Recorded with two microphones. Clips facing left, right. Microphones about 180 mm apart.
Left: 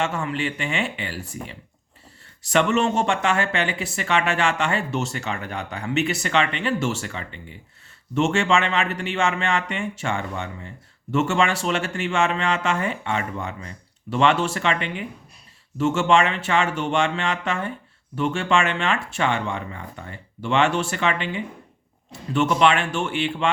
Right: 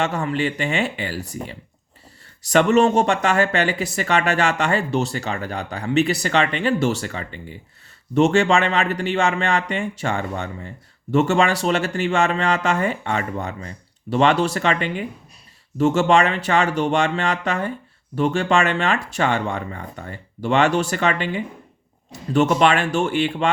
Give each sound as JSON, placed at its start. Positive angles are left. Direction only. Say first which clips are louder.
{"t": 0.0, "sound": "speech", "louder": "right 3 dB", "side_deg": -35}